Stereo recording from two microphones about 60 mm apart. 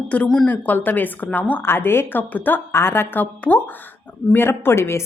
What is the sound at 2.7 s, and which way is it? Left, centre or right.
Speech, left.